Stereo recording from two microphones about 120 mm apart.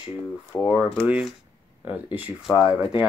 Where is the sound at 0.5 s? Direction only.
25° left (ahead or behind).